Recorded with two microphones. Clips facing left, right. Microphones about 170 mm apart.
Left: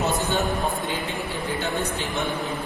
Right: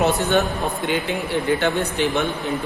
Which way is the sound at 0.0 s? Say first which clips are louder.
Right 5 dB; 70° right (ahead or behind).